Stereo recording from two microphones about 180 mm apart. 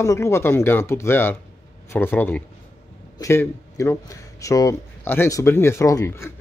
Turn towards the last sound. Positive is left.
turn(degrees=15)  # may be behind; listen again after turning